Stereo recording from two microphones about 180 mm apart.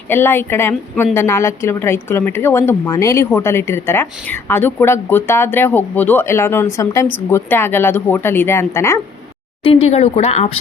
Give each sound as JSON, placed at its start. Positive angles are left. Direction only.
{"t": 0.1, "sound": "a woman's voice", "side_deg": 10}
{"t": 9.6, "sound": "speech", "side_deg": 35}